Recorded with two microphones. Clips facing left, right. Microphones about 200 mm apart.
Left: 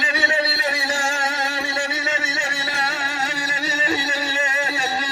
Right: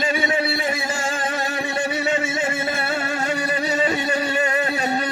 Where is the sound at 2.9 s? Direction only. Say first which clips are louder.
Right 5 dB; 55° right (ahead or behind).